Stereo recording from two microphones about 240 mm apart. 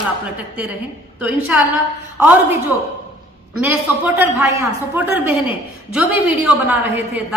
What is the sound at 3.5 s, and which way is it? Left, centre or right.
A woman's voice, centre.